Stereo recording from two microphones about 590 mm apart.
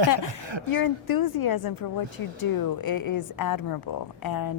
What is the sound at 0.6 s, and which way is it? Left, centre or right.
Speech, left.